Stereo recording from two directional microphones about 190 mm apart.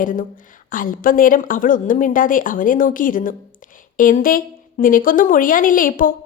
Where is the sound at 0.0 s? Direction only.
45° left (ahead or behind).